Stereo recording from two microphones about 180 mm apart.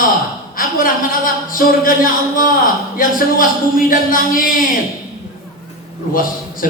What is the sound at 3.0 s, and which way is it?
Speech, 50° left (ahead or behind).